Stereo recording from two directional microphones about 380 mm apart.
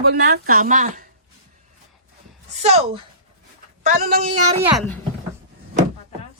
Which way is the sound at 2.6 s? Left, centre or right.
Centre.